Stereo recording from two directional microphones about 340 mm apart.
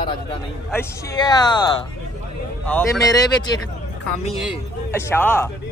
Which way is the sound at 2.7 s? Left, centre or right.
Centre.